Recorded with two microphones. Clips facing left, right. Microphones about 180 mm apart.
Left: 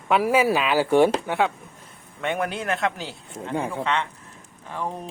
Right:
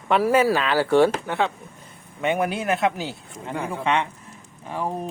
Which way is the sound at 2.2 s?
5° right (ahead or behind).